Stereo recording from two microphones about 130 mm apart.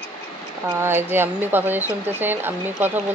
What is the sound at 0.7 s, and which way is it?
Speech, 15° right (ahead or behind).